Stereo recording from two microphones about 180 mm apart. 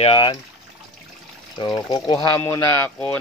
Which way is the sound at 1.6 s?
30° left (ahead or behind).